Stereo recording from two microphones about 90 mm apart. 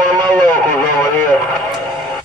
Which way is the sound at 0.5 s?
20° left (ahead or behind).